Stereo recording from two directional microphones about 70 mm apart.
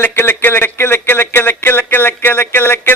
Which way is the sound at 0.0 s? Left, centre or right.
Left.